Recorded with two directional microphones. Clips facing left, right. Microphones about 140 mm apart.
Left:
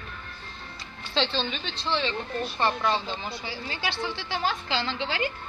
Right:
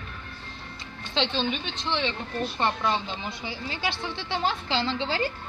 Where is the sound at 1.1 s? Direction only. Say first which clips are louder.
Right 1 dB; 15° right (ahead or behind).